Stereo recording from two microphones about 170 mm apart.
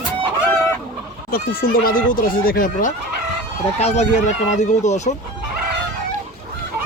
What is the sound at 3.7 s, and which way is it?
Speech, 40° left (ahead or behind).